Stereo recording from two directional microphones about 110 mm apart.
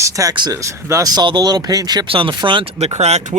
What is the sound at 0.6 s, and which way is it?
Speech, 25° right (ahead or behind).